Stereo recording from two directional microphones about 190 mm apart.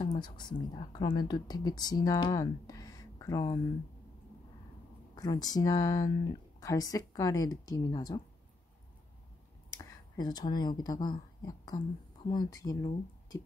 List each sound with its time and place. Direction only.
0.0 s speech: 25° left (ahead or behind)
5.1 s speech: 20° left (ahead or behind)
9.7 s speech: 20° left (ahead or behind)